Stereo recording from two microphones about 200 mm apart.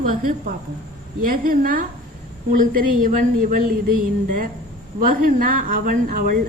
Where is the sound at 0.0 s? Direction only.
40° right (ahead or behind).